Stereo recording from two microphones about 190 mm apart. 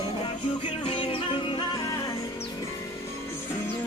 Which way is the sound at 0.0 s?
25° left (ahead or behind).